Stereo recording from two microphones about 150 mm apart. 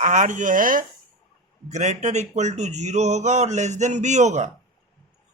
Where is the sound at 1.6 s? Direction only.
50° right (ahead or behind).